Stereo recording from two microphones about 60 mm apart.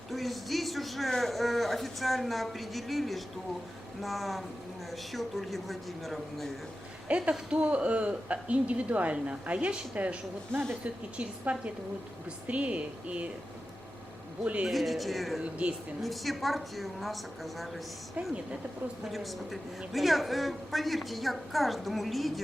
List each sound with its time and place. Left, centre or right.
0.1 s a man's voice: centre
7.3 s a woman's voice: centre
14.4 s a woman's voice: right
14.7 s a woman's voice: centre
15.6 s a woman's voice: centre
16.0 s a woman's voice: centre
19.0 s a woman's voice: centre